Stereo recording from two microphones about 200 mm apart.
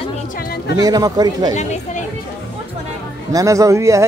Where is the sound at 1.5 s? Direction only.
35° left (ahead or behind).